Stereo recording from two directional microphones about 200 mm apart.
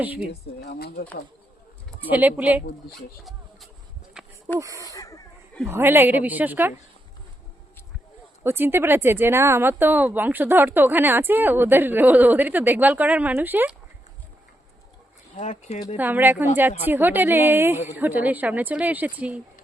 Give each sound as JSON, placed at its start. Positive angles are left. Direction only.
{"t": 0.0, "sound": "speech", "side_deg": -10}
{"t": 0.6, "sound": "speech", "side_deg": 55}
{"t": 2.0, "sound": "speech", "side_deg": -10}
{"t": 4.6, "sound": "speech", "side_deg": -15}
{"t": 4.9, "sound": "a sound", "side_deg": 15}
{"t": 5.6, "sound": "speech", "side_deg": -10}
{"t": 8.4, "sound": "speech", "side_deg": -10}
{"t": 15.4, "sound": "speech", "side_deg": 35}
{"t": 16.0, "sound": "speech", "side_deg": -10}